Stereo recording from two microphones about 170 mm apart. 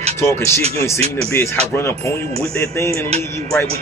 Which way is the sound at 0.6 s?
35° right (ahead or behind).